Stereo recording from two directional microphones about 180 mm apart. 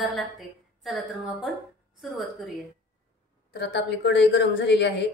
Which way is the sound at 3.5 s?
70° left (ahead or behind).